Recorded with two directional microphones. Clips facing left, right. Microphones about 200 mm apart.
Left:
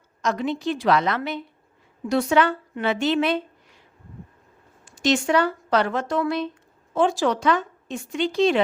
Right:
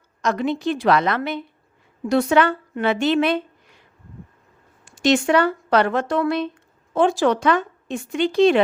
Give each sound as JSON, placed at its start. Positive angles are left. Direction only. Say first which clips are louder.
{"t": 0.2, "sound": "a woman's voice", "louder": "right 3 dB", "side_deg": -60}
{"t": 4.9, "sound": "a woman's voice", "louder": "right 3 dB", "side_deg": -65}